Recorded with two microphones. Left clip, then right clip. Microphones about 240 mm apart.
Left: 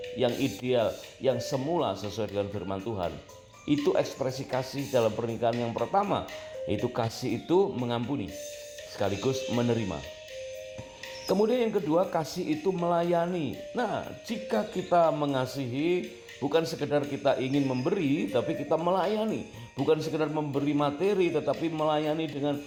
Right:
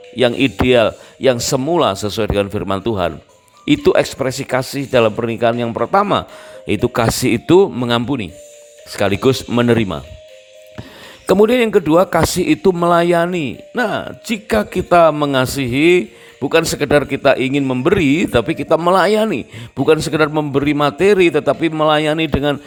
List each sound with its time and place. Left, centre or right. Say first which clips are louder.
0.2 s a man's voice: right 15 dB; right
11.3 s a man's voice: right 14 dB; right